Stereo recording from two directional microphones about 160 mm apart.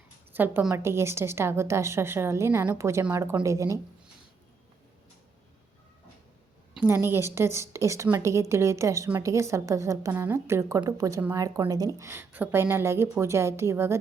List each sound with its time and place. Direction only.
0.3 s a woman's voice: 10° right (ahead or behind)
6.8 s a woman's voice: 15° right (ahead or behind)